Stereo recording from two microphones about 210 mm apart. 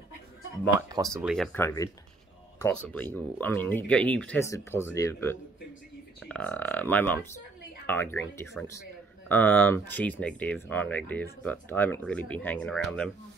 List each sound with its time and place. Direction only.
0.7 s speech: 15° right (ahead or behind)
1.2 s speech: centre (ahead or behind)